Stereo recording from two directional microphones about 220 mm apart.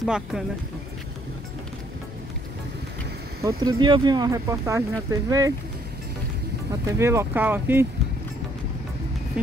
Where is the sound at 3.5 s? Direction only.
20° right (ahead or behind).